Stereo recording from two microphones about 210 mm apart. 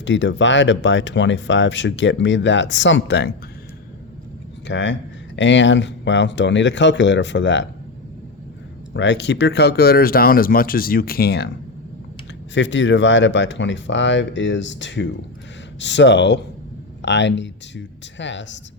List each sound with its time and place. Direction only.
0.0 s speech: 60° left (ahead or behind)
4.6 s speech: 60° left (ahead or behind)
8.9 s speech: 60° left (ahead or behind)
12.5 s speech: 60° left (ahead or behind)